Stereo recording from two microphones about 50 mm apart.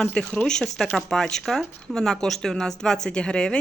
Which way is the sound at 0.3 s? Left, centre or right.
Centre.